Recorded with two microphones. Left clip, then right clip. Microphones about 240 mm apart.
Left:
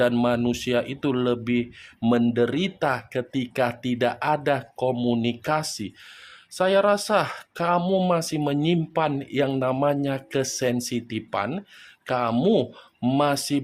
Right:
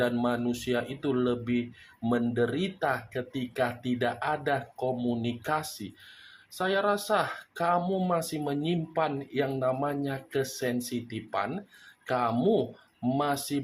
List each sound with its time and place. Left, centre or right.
0.0 s speech: left